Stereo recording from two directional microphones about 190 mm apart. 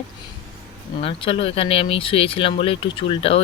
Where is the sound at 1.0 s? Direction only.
30° left (ahead or behind).